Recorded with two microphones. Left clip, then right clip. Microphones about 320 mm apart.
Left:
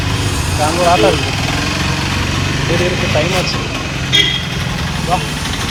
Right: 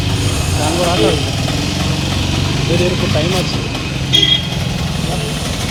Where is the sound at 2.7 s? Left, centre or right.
Centre.